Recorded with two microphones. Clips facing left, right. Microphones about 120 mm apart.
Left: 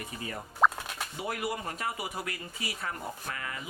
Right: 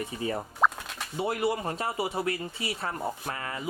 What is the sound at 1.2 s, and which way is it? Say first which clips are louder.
Speech: right 7 dB; 30° right (ahead or behind).